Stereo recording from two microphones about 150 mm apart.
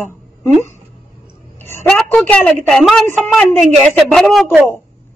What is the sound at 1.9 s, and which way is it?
A woman's voice, 5° left (ahead or behind).